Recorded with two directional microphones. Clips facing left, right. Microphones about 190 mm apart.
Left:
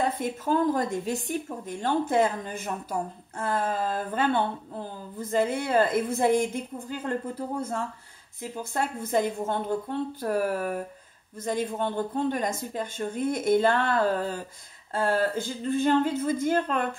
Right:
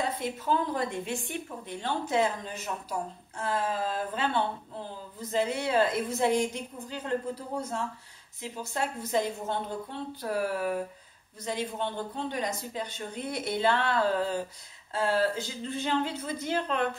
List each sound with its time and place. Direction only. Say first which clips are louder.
0.2 s speech: left 4 dB; 45° left (ahead or behind)